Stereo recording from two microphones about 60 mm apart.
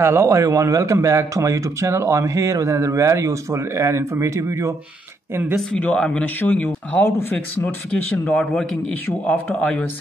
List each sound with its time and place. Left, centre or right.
0.0 s a man's voice: right
0.3 s speech: right
5.7 s speech: left
7.1 s speech: left
7.9 s speech: left